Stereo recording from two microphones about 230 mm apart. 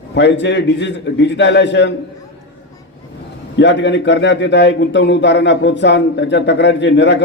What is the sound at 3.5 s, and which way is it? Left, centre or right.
A man's voice, left.